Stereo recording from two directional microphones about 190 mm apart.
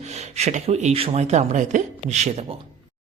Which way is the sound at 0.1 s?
35° right (ahead or behind).